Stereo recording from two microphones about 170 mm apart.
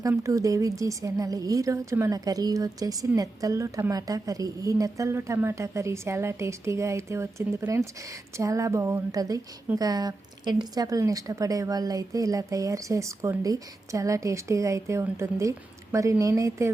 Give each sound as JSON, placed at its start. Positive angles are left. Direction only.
{"t": 0.0, "sound": "a woman's voice", "side_deg": -20}